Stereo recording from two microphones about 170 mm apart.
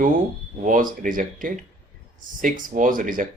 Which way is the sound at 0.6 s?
50° right (ahead or behind).